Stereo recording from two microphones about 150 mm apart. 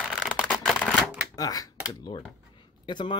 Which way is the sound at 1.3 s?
25° left (ahead or behind).